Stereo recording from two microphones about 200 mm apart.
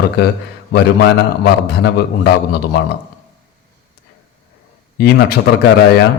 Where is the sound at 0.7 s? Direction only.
60° left (ahead or behind).